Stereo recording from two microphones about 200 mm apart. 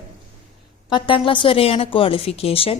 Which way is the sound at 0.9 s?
25° left (ahead or behind).